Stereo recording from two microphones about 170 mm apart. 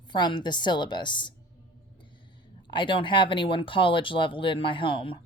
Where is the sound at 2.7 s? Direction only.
30° left (ahead or behind).